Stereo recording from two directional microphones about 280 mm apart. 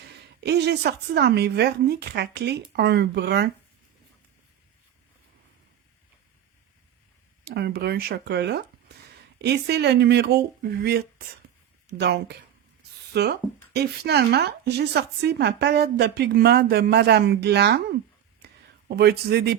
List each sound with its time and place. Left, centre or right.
0.4 s a woman's voice: right
7.4 s a woman's voice: right
18.9 s a woman's voice: right